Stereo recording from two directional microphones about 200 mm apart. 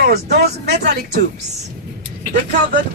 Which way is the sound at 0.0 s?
55° right (ahead or behind).